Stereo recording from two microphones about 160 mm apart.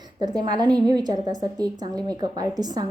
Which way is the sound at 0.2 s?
25° right (ahead or behind).